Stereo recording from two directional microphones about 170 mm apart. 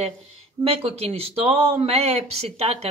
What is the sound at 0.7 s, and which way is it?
A woman's voice, 35° right (ahead or behind).